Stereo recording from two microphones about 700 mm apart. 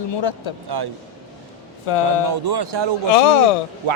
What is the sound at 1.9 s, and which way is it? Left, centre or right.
Speech, left.